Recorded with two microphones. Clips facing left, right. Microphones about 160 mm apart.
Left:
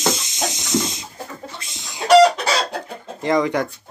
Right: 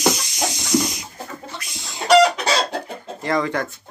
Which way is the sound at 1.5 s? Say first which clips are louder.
Right 2 dB; 20° left (ahead or behind).